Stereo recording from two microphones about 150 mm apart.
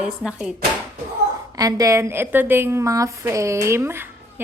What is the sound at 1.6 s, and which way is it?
A woman's voice, 25° right (ahead or behind).